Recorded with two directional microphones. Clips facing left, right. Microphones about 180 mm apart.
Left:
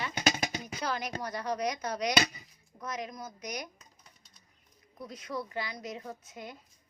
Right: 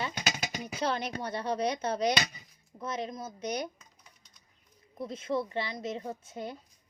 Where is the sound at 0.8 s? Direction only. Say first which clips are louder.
Right 3 dB; 30° right (ahead or behind).